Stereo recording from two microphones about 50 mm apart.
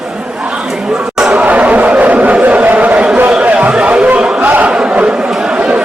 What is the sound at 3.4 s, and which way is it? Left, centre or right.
Chatter, right.